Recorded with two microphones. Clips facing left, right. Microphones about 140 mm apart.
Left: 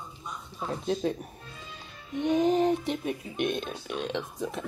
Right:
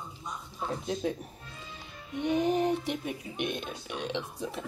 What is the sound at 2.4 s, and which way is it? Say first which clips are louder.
Speech: left 3 dB; 10° right (ahead or behind).